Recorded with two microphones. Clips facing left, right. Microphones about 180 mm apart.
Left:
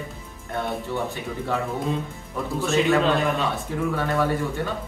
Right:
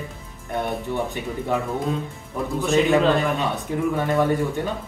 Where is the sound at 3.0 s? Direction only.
Centre (ahead or behind).